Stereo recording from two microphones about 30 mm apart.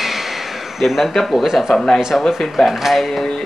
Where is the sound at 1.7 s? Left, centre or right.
Left.